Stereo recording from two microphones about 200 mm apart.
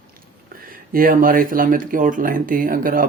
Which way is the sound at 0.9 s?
45° right (ahead or behind).